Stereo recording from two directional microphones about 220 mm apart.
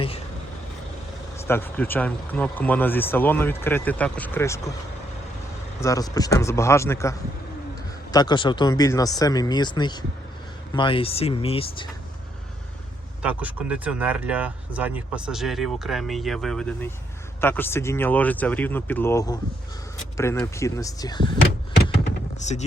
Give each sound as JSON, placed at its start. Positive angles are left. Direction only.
{"t": 1.5, "sound": "speech", "side_deg": 10}
{"t": 5.8, "sound": "speech", "side_deg": 15}
{"t": 13.2, "sound": "speech", "side_deg": -5}
{"t": 22.4, "sound": "speech", "side_deg": 30}